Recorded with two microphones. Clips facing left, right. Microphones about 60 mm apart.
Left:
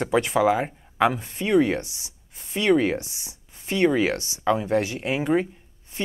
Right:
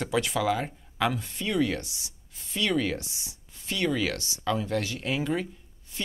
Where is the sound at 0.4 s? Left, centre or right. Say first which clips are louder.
Left 6 dB; left.